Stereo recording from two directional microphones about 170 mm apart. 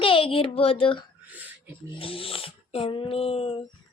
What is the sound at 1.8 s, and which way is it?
Speech, 30° left (ahead or behind).